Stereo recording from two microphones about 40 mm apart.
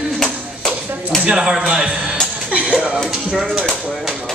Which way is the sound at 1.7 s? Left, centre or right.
Right.